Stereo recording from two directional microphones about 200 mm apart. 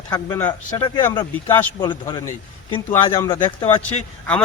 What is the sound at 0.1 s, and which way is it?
A man's voice, 15° left (ahead or behind).